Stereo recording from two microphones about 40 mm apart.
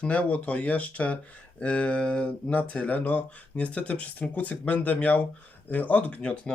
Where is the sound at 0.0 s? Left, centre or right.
Left.